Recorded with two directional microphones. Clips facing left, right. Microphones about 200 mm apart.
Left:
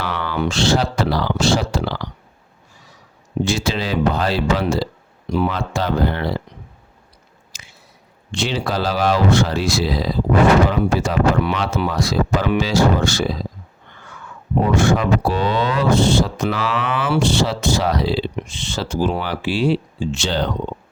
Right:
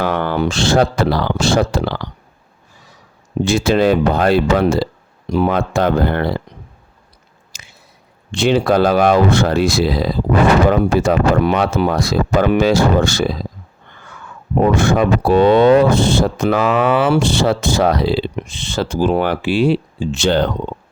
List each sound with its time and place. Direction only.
0.0 s speech: 50° right (ahead or behind)
3.4 s speech: 55° right (ahead or behind)
7.5 s squish: 55° right (ahead or behind)
8.3 s speech: 55° right (ahead or behind)
14.6 s speech: 55° right (ahead or behind)